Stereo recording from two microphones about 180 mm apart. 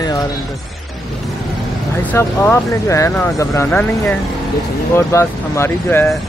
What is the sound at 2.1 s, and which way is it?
Speech, 15° left (ahead or behind).